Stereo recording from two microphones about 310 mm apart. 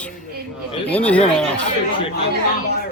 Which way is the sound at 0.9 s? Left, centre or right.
Centre.